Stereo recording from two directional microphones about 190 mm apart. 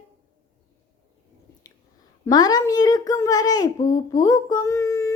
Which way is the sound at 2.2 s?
20° left (ahead or behind).